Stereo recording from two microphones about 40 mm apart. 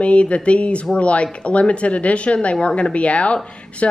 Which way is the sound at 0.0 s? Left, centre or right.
Left.